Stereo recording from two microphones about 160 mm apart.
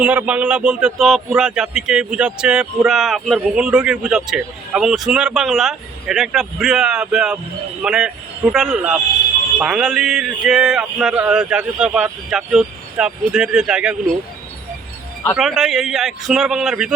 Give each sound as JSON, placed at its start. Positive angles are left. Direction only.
{"t": 0.0, "sound": "speech", "side_deg": -10}
{"t": 15.4, "sound": "speech", "side_deg": 0}